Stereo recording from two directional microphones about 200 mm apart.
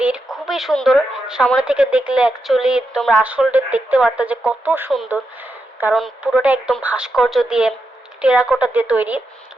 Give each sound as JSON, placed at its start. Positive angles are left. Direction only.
{"t": 0.0, "sound": "a woman's voice", "side_deg": -5}